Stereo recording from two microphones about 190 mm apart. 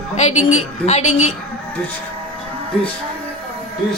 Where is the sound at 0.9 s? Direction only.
35° left (ahead or behind).